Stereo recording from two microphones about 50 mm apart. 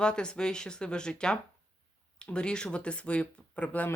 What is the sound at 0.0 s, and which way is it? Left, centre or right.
Speech, centre.